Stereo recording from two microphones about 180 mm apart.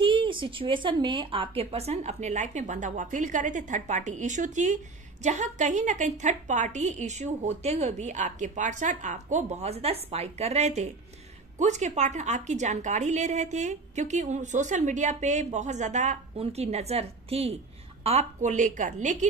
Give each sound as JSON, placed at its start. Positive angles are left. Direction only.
{"t": 0.0, "sound": "a woman's voice", "side_deg": -30}